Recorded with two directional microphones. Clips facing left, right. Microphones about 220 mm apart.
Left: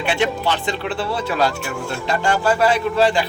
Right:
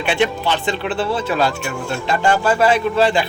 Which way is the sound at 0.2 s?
20° right (ahead or behind).